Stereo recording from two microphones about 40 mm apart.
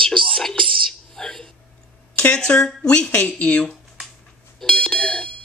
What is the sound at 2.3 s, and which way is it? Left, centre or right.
Speech, left.